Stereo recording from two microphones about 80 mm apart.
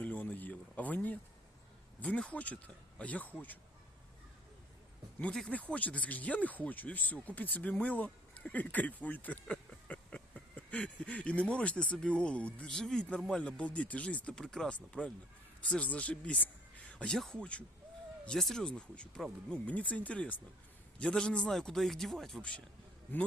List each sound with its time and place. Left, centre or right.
0.0 s a sound: left
2.0 s speech: centre
5.5 s a man's voice: centre